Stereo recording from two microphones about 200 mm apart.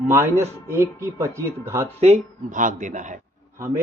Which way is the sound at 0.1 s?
15° right (ahead or behind).